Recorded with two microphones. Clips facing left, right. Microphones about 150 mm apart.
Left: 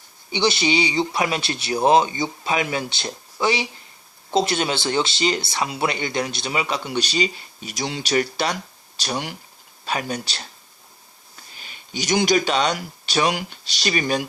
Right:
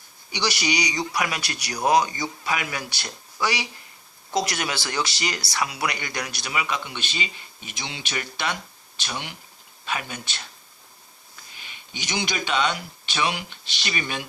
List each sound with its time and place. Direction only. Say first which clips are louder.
0.3 s speech: left 6 dB; 25° left (ahead or behind)
11.5 s speech: left 9 dB; 40° left (ahead or behind)